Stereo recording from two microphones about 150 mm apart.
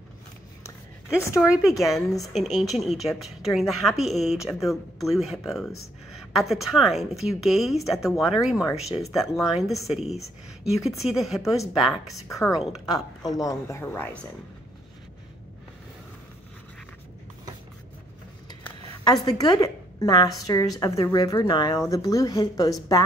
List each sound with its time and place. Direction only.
0.7 s a sound: 20° left (ahead or behind)
1.8 s a woman's voice: centre (ahead or behind)
12.3 s speech: 20° left (ahead or behind)
19.0 s a woman's voice: 25° left (ahead or behind)